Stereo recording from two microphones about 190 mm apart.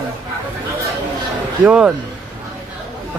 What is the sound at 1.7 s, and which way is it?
Speech, 5° right (ahead or behind).